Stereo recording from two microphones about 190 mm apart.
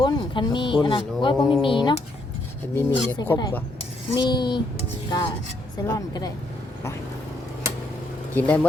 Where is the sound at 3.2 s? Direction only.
20° left (ahead or behind).